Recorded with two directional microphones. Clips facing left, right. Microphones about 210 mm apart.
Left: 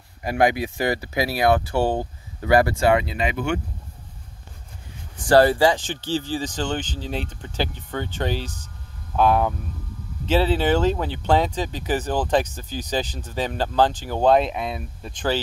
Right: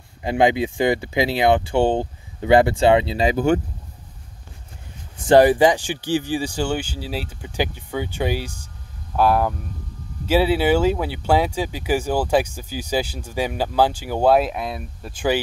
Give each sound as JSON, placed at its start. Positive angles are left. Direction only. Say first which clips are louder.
{"t": 0.2, "sound": "speech", "louder": "right 2 dB", "side_deg": -25}
{"t": 5.1, "sound": "speech", "louder": "right 3 dB", "side_deg": -20}